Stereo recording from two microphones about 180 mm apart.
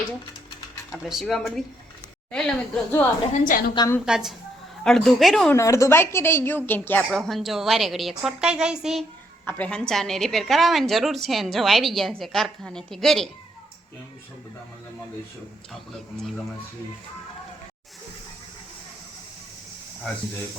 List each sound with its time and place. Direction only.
1.0 s a woman's voice: centre (ahead or behind)
3.3 s a woman's voice: 50° left (ahead or behind)
3.8 s a woman's voice: 15° left (ahead or behind)
4.0 s a woman's voice: 5° right (ahead or behind)
5.5 s a woman's voice: 15° left (ahead or behind)